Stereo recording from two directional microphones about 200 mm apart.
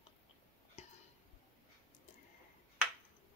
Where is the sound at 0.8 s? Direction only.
35° left (ahead or behind).